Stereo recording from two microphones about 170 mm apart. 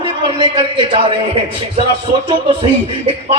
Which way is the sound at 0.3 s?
30° right (ahead or behind).